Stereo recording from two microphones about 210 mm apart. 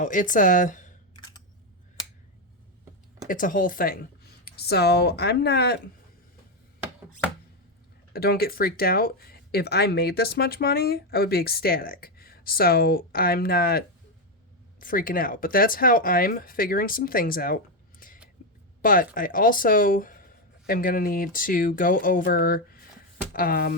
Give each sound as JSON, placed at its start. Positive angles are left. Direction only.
{"t": 0.0, "sound": "speech", "side_deg": 40}
{"t": 3.2, "sound": "speech", "side_deg": 40}
{"t": 8.1, "sound": "speech", "side_deg": 45}
{"t": 18.8, "sound": "speech", "side_deg": 40}